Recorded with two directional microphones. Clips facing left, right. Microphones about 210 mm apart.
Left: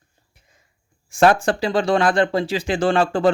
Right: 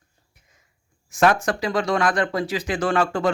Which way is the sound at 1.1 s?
30° left (ahead or behind).